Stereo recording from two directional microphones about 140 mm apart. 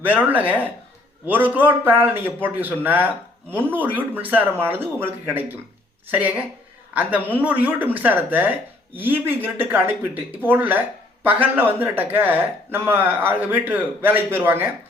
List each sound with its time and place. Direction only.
0.0 s speech: 10° right (ahead or behind)